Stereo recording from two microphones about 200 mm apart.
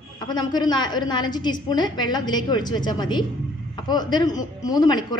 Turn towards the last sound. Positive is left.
turn(degrees=20)  # may be behind; listen again after turning